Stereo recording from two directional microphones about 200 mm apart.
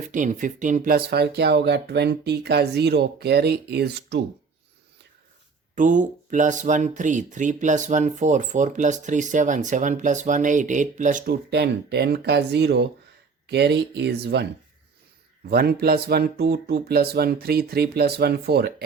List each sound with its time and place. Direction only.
0.1 s speech: 40° right (ahead or behind); by 4.2 s 55° right (ahead or behind)
5.7 s speech: 40° right (ahead or behind)
11.5 s speech: 55° right (ahead or behind)
15.4 s speech: 50° right (ahead or behind)